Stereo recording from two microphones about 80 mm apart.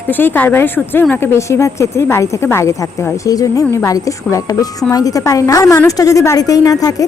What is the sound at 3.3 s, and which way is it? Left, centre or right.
Speech, left.